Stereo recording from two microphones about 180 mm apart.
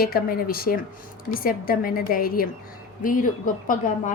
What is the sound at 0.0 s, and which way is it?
A woman's voice, 55° left (ahead or behind).